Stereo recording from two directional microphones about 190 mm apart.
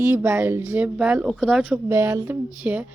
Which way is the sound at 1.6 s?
10° right (ahead or behind).